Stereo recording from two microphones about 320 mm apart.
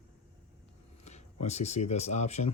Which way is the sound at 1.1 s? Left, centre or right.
Left.